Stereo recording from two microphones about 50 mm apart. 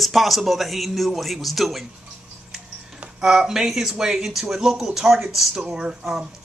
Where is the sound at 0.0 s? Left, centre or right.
Centre.